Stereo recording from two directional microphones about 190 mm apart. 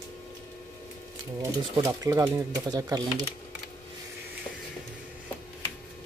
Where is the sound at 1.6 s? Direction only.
20° right (ahead or behind).